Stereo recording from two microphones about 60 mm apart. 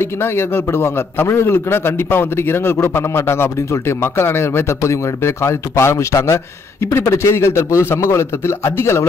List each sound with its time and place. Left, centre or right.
0.0 s a man's voice: left